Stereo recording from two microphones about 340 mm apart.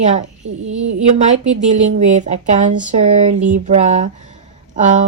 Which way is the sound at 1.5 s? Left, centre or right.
Right.